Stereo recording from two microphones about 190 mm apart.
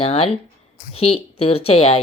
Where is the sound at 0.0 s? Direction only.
30° left (ahead or behind).